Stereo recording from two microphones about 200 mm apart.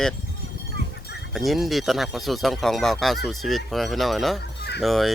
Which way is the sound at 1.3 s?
Centre (ahead or behind).